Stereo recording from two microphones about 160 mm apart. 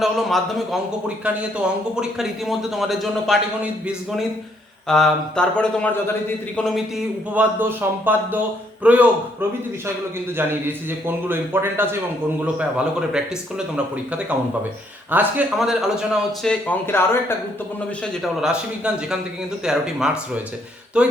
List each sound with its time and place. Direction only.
0.0 s speech: centre (ahead or behind)
7.6 s a man's voice: 15° right (ahead or behind)
10.3 s a man's voice: 15° right (ahead or behind); by 17.3 s 15° left (ahead or behind)
18.0 s a man's voice: centre (ahead or behind)